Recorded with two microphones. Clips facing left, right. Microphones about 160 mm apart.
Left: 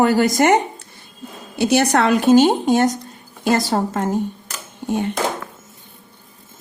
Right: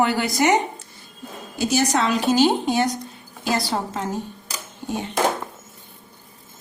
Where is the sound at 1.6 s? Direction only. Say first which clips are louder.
Left 5 dB; 65° left (ahead or behind); by 4.0 s 45° left (ahead or behind).